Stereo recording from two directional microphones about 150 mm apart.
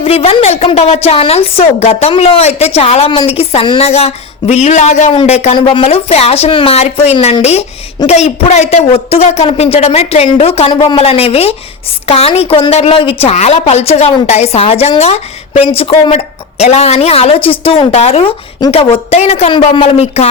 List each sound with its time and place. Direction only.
0.0 s a woman's voice: 40° left (ahead or behind)